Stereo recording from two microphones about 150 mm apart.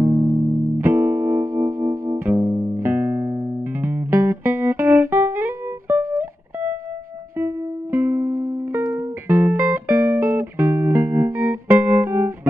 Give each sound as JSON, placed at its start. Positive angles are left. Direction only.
{"t": 0.0, "sound": "music", "side_deg": -20}
{"t": 7.3, "sound": "music", "side_deg": -15}